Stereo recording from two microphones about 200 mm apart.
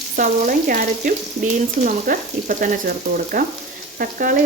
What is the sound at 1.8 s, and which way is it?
Frying, 40° right (ahead or behind).